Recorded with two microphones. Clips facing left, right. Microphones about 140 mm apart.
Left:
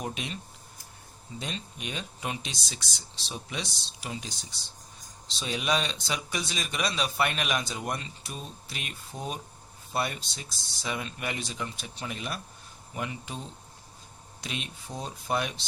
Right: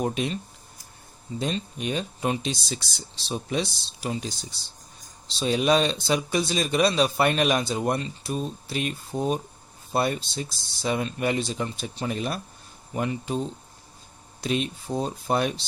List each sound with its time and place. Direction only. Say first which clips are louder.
0.0 s speech: right 9 dB; 35° right (ahead or behind)
1.4 s speech: right 9 dB; 35° right (ahead or behind)
5.4 s speech: right 8 dB; 35° right (ahead or behind)
14.4 s speech: right 11 dB; 35° right (ahead or behind)